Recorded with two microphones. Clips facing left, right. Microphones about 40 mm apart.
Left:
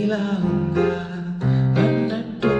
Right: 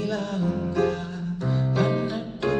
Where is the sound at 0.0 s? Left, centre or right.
Left.